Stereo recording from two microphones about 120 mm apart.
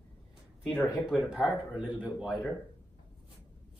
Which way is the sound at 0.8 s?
10° right (ahead or behind).